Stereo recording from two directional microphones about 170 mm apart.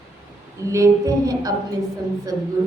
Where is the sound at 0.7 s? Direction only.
20° right (ahead or behind).